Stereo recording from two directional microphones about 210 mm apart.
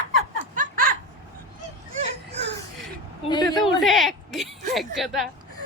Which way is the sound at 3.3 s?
20° left (ahead or behind).